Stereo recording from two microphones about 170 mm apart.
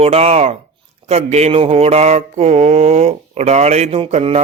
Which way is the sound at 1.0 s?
40° right (ahead or behind).